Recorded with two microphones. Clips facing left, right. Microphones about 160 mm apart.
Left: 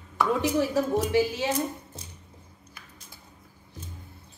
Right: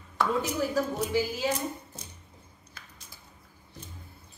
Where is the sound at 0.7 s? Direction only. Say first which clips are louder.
Left 4 dB; 85° left.